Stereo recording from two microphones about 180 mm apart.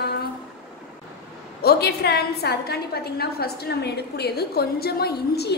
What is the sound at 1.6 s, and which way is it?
A woman's voice, 65° left (ahead or behind).